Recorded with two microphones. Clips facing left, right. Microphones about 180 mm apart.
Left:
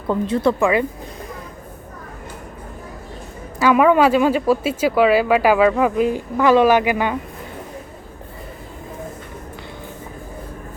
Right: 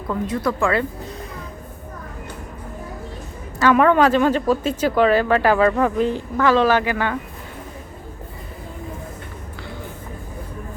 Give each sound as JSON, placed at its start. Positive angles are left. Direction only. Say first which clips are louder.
{"t": 0.1, "sound": "speech", "louder": "left 5 dB", "side_deg": 25}
{"t": 3.6, "sound": "speech", "louder": "left 1 dB", "side_deg": 10}